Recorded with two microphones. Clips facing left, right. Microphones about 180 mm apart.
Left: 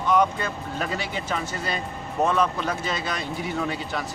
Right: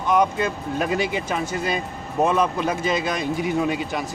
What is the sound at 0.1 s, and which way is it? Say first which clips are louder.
Speech: right 2 dB; 15° right (ahead or behind).